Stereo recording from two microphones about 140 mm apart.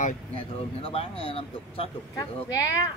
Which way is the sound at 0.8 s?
45° left (ahead or behind).